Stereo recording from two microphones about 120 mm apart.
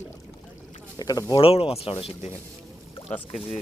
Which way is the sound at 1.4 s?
50° left (ahead or behind).